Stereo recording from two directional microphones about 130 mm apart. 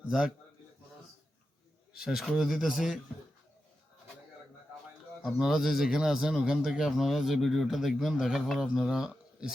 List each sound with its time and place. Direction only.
2.0 s speech: 5° right (ahead or behind)
5.2 s speech: centre (ahead or behind)